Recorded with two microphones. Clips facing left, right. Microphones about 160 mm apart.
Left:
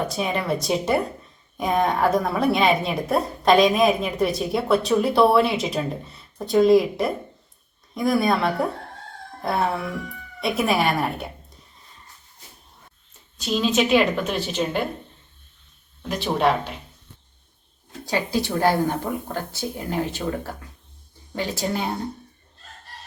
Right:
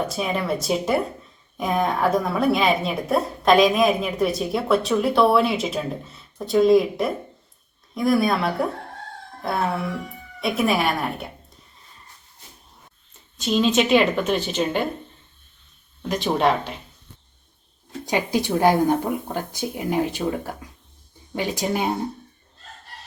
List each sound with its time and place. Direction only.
0.1 s a woman's voice: centre (ahead or behind)
13.4 s a woman's voice: centre (ahead or behind)
16.0 s a woman's voice: 5° left (ahead or behind)
18.0 s speech: 20° right (ahead or behind)